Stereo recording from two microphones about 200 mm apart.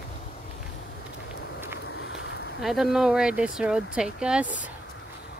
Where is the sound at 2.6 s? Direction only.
Centre (ahead or behind).